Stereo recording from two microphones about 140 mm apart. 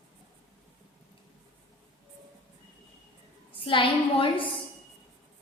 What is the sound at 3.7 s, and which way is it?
Speech, 40° left (ahead or behind).